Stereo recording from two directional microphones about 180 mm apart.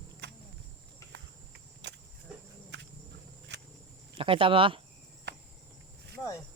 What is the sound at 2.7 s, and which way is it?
Cricket, 75° right (ahead or behind).